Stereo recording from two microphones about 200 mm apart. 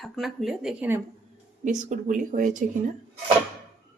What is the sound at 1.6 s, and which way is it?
Speech, 40° right (ahead or behind).